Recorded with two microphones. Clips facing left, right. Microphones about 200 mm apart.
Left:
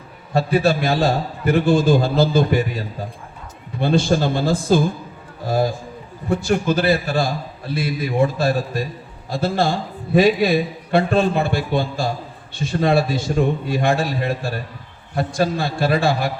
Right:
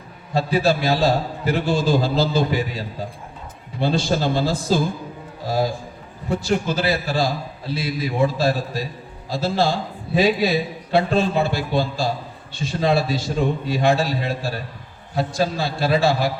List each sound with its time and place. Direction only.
0.3 s a man's voice: 50° left (ahead or behind)
6.3 s a man's voice: 55° left (ahead or behind)